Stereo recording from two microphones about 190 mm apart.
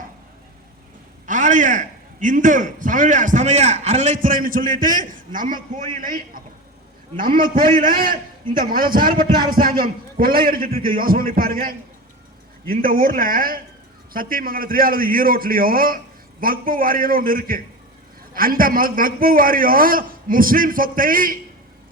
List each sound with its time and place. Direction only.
1.3 s a man's voice: 40° right (ahead or behind)